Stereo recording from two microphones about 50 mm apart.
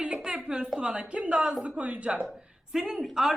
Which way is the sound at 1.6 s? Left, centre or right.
Right.